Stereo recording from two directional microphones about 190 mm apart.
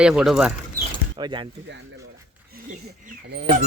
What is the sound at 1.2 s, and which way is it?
Speech, 25° right (ahead or behind).